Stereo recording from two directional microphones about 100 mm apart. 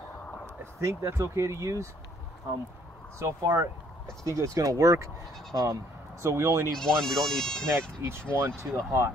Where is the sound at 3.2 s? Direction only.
30° right (ahead or behind).